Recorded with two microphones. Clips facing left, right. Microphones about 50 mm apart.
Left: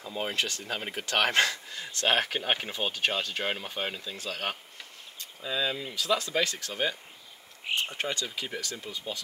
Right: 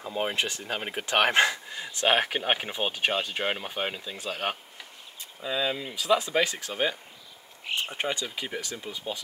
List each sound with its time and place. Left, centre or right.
0.0 s speech: centre